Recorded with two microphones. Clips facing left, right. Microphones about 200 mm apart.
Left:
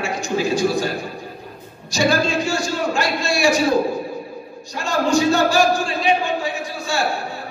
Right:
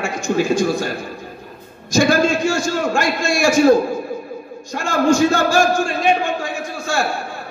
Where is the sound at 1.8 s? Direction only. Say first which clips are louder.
Right 4 dB; 50° right (ahead or behind).